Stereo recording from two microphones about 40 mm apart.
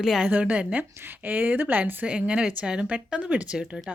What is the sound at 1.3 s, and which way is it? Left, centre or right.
Speech, right.